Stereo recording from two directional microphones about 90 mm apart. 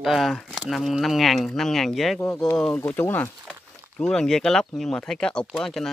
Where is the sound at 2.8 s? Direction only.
20° left (ahead or behind).